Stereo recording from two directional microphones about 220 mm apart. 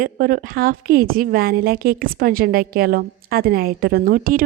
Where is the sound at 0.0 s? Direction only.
40° right (ahead or behind).